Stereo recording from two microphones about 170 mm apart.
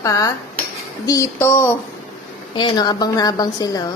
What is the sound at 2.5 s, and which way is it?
A woman's voice, 25° left (ahead or behind).